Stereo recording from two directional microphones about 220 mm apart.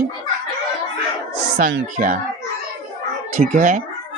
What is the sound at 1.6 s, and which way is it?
Speech, 40° right (ahead or behind).